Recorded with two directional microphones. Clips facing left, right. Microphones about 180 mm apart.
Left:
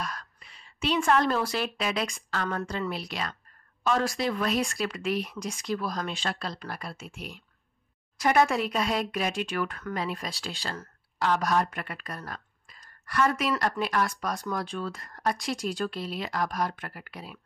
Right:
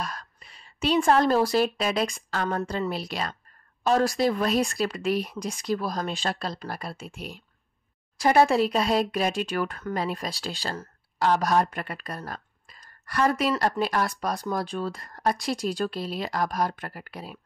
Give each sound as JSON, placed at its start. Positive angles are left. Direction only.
{"t": 0.0, "sound": "a woman's voice", "side_deg": -30}